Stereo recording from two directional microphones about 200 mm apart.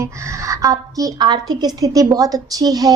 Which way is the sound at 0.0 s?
15° right (ahead or behind).